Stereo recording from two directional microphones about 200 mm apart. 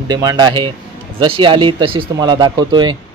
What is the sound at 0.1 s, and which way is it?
Speech, 20° right (ahead or behind).